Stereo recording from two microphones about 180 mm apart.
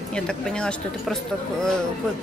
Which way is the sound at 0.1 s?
5° left (ahead or behind).